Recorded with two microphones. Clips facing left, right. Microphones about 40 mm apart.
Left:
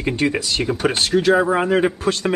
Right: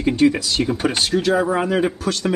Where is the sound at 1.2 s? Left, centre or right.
Left.